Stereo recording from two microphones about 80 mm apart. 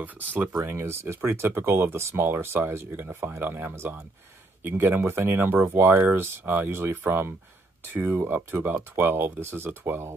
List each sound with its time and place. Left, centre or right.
0.0 s speech: right
0.6 s speech: right